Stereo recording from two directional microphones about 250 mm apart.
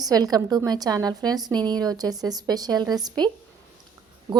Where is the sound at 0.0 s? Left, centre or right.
Centre.